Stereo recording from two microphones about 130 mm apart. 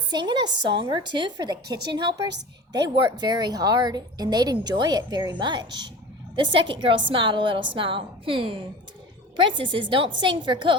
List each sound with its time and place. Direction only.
0.1 s a woman's voice: 35° right (ahead or behind)